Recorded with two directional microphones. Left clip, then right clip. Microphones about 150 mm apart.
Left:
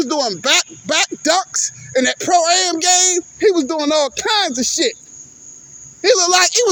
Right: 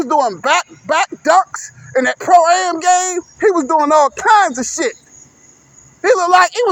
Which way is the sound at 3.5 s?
55° left (ahead or behind).